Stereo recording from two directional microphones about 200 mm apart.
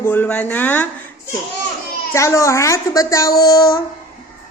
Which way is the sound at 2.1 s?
15° left (ahead or behind).